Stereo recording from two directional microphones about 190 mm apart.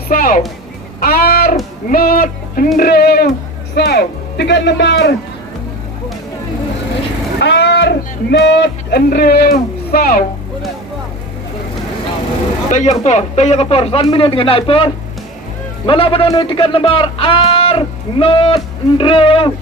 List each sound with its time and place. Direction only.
0.1 s a man's voice: 45° left (ahead or behind); by 5.1 s 65° left (ahead or behind)
7.3 s speech: 65° left (ahead or behind)
12.7 s speech: 35° left (ahead or behind)
15.9 s speech: 30° left (ahead or behind)